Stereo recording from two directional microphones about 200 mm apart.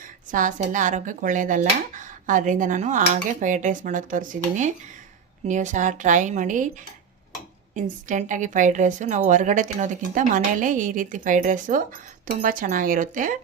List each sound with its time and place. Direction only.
0.3 s a woman's voice: 40° right (ahead or behind)
7.7 s a woman's voice: 40° right (ahead or behind)